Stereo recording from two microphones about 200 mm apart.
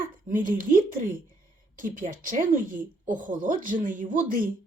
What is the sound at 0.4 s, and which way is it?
Speech, 45° right (ahead or behind).